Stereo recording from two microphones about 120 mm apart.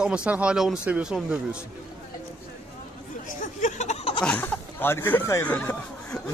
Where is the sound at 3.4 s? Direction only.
90° left; by 4.1 s 65° left (ahead or behind).